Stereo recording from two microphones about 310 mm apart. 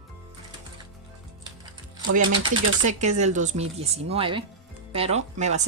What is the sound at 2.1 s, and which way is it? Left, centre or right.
Speech, right.